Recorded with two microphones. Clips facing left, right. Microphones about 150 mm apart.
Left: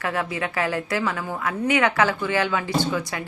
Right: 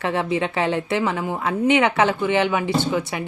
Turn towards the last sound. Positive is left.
turn(degrees=-20)  # may be behind; listen again after turning